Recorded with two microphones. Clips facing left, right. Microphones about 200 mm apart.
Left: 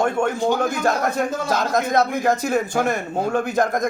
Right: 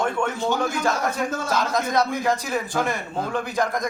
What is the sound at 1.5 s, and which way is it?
A man's voice, 50° left (ahead or behind).